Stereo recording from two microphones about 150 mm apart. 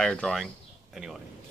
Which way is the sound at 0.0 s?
5° left (ahead or behind).